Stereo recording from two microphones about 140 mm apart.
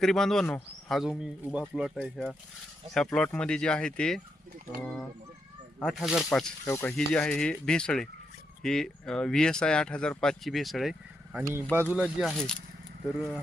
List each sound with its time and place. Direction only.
0.0 s speech: 5° left (ahead or behind)
5.8 s speech: centre (ahead or behind)
6.7 s speech: 20° left (ahead or behind)
6.9 s speech: 5° left (ahead or behind)